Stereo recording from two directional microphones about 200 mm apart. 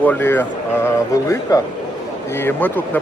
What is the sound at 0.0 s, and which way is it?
A man's voice, 10° left (ahead or behind).